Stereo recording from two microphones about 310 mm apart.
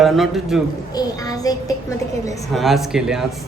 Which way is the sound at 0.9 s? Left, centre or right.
Centre.